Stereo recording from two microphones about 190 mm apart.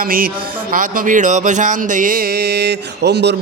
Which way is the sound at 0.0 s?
50° right (ahead or behind).